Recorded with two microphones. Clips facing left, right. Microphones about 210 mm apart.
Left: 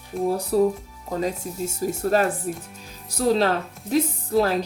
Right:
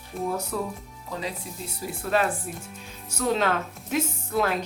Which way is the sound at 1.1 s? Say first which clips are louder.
Left 7 dB; 45° left (ahead or behind).